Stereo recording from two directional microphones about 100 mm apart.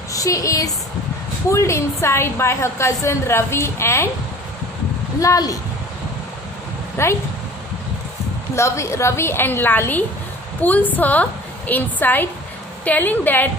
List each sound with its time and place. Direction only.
0.1 s a woman's voice: 35° left (ahead or behind)
5.2 s speech: 35° left (ahead or behind)
7.0 s a woman's voice: 25° left (ahead or behind)
8.5 s a woman's voice: 30° left (ahead or behind)